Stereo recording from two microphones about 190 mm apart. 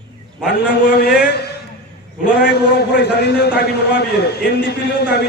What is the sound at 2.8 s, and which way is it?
A man's voice, 55° left (ahead or behind).